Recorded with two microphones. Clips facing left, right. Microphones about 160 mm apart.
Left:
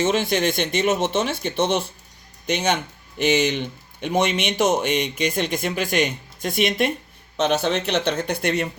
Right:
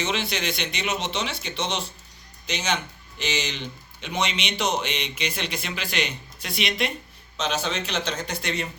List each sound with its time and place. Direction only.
0.0 s speech: 50° left (ahead or behind)